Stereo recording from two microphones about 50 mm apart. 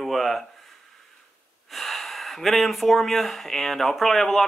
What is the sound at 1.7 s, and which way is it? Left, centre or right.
Speech, centre.